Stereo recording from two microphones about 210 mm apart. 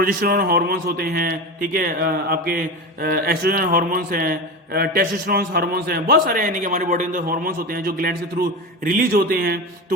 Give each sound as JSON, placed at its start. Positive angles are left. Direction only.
{"t": 0.0, "sound": "a man's voice", "side_deg": -45}